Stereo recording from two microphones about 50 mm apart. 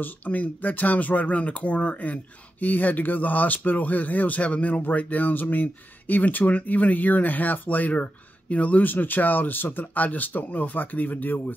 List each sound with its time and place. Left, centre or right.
0.0 s speech: left